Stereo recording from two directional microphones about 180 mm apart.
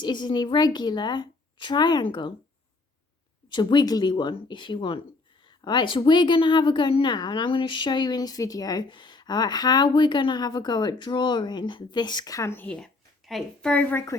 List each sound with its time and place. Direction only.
0.0 s a woman's voice: 25° left (ahead or behind)
3.5 s a woman's voice: 25° left (ahead or behind)